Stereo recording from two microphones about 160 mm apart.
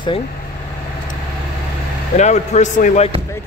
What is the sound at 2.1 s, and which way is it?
Speech, 45° left (ahead or behind).